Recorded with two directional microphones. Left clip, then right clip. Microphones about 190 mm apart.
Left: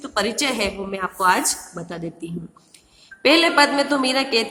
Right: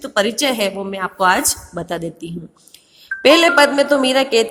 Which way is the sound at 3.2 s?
30° right (ahead or behind).